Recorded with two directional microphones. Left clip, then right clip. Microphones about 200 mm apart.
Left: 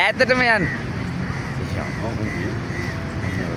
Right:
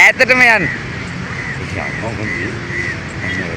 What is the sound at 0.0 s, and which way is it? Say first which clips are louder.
Speech: right 9 dB; 30° right (ahead or behind).